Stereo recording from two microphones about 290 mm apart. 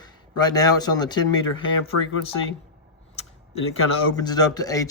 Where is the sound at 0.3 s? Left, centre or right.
Centre.